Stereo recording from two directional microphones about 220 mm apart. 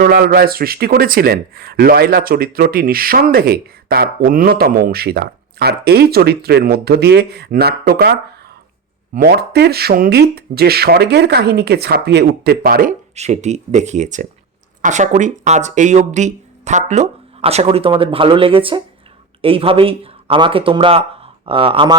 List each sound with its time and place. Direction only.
0.0 s a man's voice: 40° right (ahead or behind); by 21.9 s 25° right (ahead or behind)